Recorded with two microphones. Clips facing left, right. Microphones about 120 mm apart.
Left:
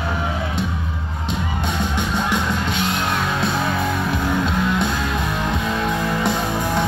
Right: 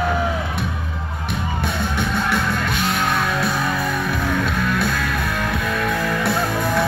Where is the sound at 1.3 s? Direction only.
20° left (ahead or behind).